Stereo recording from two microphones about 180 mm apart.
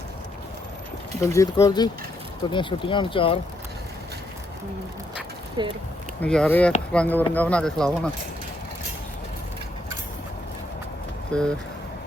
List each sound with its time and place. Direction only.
1.2 s speech: 15° left (ahead or behind)
5.6 s speech: 25° right (ahead or behind)
6.2 s speech: 5° left (ahead or behind)
11.3 s speech: 5° left (ahead or behind)